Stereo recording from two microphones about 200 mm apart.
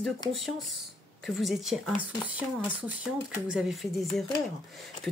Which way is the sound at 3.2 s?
5° right (ahead or behind).